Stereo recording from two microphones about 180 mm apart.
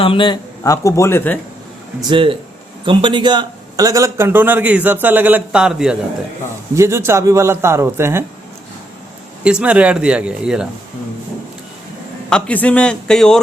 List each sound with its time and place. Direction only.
0.0 s speech: 30° left (ahead or behind); by 1.4 s 10° left (ahead or behind)
2.0 s a man's voice: 25° right (ahead or behind); by 6.0 s 5° right (ahead or behind)
6.7 s a man's voice: 15° right (ahead or behind)
9.4 s speech: 5° right (ahead or behind)
12.3 s speech: 5° left (ahead or behind)